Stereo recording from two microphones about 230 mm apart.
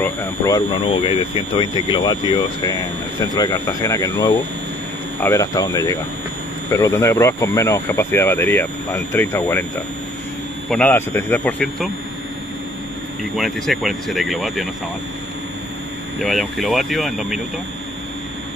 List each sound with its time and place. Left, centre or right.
0.0 s speech: centre
10.7 s speech: centre
13.2 s speech: centre
16.2 s speech: centre